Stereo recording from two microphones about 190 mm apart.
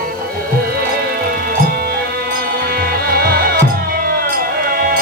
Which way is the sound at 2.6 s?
55° right (ahead or behind).